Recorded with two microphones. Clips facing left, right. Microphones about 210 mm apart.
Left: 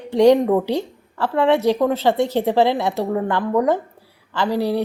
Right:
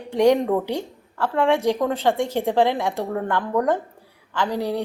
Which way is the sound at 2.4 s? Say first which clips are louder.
Even; 10° left (ahead or behind).